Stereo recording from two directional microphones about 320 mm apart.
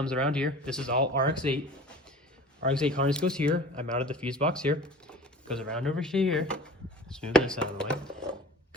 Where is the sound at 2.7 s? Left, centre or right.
Centre.